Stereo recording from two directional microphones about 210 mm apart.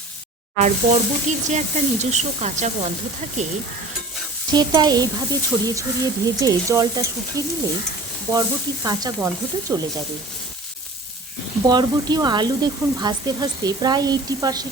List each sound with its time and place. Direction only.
0.6 s speech: 35° right (ahead or behind)
4.5 s speech: 20° right (ahead or behind)
11.6 s speech: 20° right (ahead or behind)